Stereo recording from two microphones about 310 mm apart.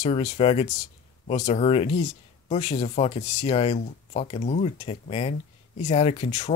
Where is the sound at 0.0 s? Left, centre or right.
Left.